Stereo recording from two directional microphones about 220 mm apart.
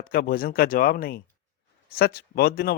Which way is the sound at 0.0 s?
40° left (ahead or behind).